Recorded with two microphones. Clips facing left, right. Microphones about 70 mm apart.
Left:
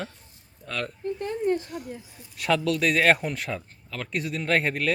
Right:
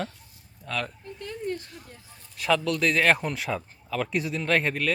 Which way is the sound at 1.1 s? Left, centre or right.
Left.